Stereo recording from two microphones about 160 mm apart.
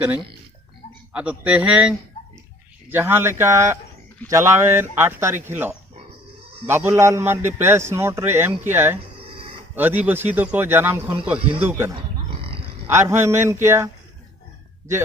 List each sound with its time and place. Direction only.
1.1 s a man's voice: 10° right (ahead or behind)
12.3 s roaring cats: 35° right (ahead or behind)
12.9 s a man's voice: 15° right (ahead or behind)